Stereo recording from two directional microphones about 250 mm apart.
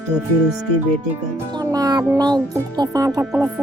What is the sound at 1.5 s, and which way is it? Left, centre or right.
Speech, centre.